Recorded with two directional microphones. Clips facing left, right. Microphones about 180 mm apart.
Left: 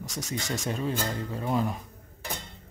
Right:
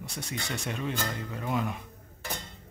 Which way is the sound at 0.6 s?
35° left (ahead or behind).